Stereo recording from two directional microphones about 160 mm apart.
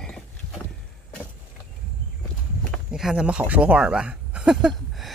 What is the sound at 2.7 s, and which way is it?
Speech, 5° right (ahead or behind).